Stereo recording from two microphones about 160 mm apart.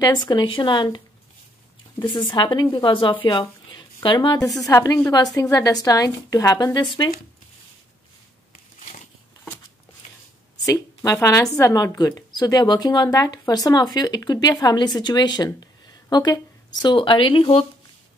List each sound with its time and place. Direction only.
0.0 s a woman's voice: 25° left (ahead or behind)
8.7 s a sound: 50° left (ahead or behind)
10.6 s a woman's voice: 20° left (ahead or behind); by 17.6 s 35° left (ahead or behind)